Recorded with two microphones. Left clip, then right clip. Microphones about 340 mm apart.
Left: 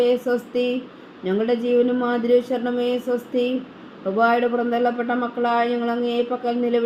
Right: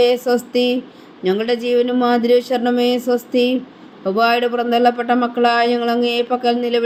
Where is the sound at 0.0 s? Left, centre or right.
Right.